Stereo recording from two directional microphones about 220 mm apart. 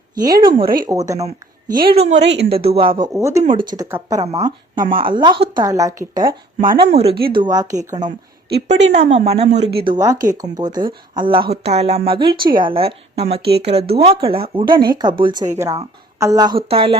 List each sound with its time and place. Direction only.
0.2 s speech: 15° right (ahead or behind)
1.2 s a woman's voice: 40° right (ahead or behind)
2.5 s speech: 25° right (ahead or behind)
3.2 s speech: 10° right (ahead or behind)
4.8 s a woman's voice: 40° right (ahead or behind)
5.0 s speech: 20° right (ahead or behind)
9.0 s speech: 30° right (ahead or behind)
9.8 s speech: 20° right (ahead or behind)
12.3 s a woman's voice: 40° right (ahead or behind)
12.5 s speech: 25° right (ahead or behind)